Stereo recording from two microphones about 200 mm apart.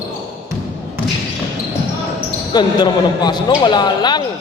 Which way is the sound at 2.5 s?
20° left (ahead or behind).